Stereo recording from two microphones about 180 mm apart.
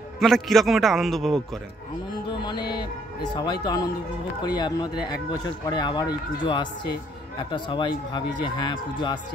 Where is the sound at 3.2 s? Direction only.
20° left (ahead or behind).